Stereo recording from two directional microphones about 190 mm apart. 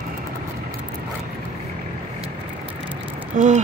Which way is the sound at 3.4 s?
45° right (ahead or behind).